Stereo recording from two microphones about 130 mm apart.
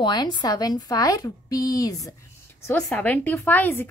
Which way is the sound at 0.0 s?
35° left (ahead or behind).